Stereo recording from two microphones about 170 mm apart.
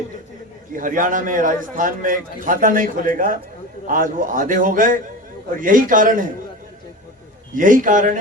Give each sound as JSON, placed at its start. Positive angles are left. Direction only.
{"t": 0.8, "sound": "a man's voice", "side_deg": -50}
{"t": 7.5, "sound": "a man's voice", "side_deg": -50}